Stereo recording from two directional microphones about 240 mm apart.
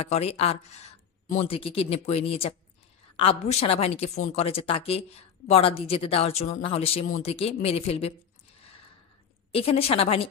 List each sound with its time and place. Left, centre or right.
0.0 s a woman's voice: left
9.5 s a woman's voice: left